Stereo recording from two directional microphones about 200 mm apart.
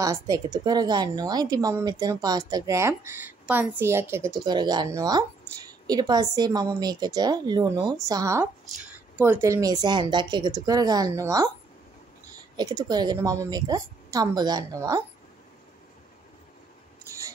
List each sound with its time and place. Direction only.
0.0 s a woman's voice: 15° right (ahead or behind)
12.5 s a woman's voice: 20° right (ahead or behind)